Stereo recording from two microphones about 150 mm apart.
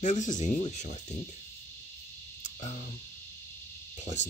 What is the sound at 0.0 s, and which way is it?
Insect, 55° left (ahead or behind).